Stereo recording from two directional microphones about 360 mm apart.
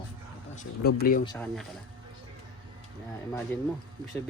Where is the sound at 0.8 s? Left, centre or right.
Left.